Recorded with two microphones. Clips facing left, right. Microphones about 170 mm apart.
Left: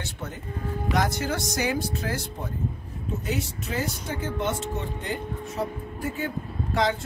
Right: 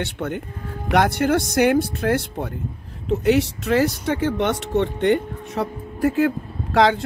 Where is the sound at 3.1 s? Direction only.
75° right (ahead or behind).